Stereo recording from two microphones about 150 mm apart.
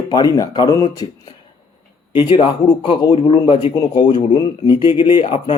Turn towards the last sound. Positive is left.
turn(degrees=35)  # may be behind; listen again after turning